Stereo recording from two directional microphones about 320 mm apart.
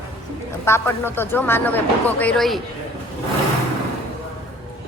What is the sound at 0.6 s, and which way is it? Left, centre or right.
Speech, centre.